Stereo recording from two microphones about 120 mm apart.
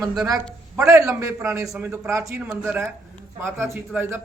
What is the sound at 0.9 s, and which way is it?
Speech, 25° right (ahead or behind).